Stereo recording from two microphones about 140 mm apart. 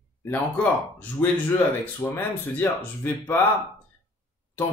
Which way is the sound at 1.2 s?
20° left (ahead or behind).